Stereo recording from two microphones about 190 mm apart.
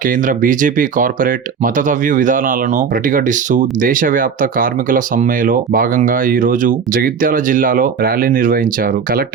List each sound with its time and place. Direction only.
0.0 s speech: 45° right (ahead or behind)